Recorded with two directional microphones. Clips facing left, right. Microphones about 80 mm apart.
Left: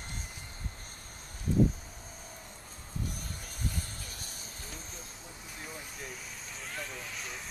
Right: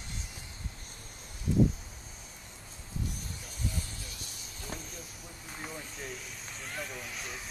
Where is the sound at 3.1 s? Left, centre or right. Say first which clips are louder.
Even; left.